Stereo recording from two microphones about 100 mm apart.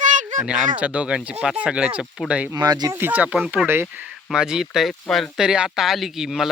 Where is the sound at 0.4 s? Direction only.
10° right (ahead or behind).